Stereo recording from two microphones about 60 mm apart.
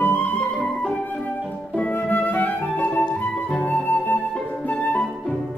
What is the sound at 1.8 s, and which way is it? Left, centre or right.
Music, left.